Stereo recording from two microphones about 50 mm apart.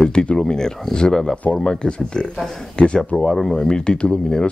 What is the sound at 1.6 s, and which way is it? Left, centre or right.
Speech, centre.